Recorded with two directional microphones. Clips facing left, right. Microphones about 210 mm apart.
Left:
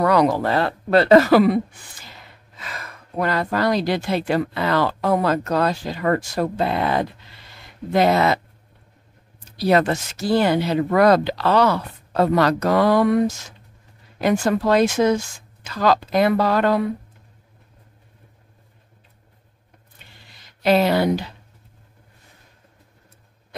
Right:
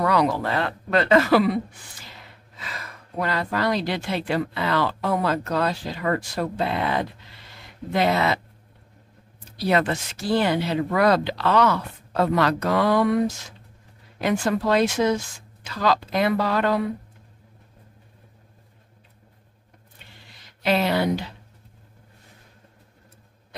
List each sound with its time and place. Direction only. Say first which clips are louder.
0.0 s speech: left 4 dB; 45° left (ahead or behind)
2.6 s speech: left 2 dB; 45° left (ahead or behind)
9.6 s speech: left 4 dB; 40° left (ahead or behind)
20.6 s speech: left 4 dB; 40° left (ahead or behind)